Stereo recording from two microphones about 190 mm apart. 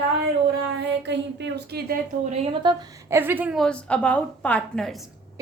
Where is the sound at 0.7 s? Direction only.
65° right (ahead or behind); by 2.3 s 50° right (ahead or behind).